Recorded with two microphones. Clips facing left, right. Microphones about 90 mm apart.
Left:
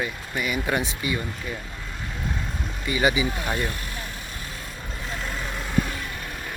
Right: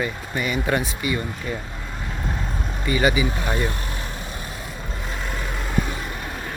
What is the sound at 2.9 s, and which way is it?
Speech, 15° left (ahead or behind).